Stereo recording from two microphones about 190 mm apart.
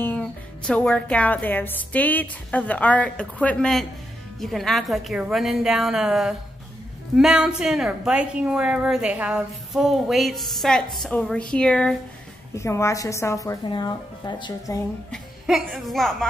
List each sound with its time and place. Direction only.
0.0 s a woman's voice: 5° left (ahead or behind)
12.5 s speech: 15° left (ahead or behind)
15.0 s speech: centre (ahead or behind)